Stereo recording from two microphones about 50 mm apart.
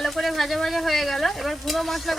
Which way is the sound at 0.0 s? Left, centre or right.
Centre.